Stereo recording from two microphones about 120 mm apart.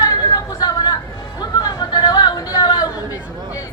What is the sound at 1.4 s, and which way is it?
Chatter, 35° left (ahead or behind).